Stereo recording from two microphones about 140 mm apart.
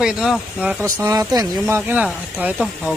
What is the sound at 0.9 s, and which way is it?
Speech, 25° right (ahead or behind).